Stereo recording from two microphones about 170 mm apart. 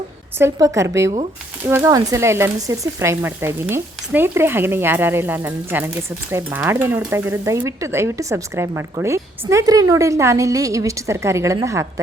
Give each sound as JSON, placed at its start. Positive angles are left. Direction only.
{"t": 0.3, "sound": "speech", "side_deg": -15}